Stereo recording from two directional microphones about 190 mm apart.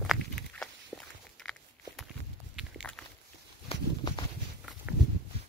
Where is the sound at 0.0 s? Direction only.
Centre (ahead or behind).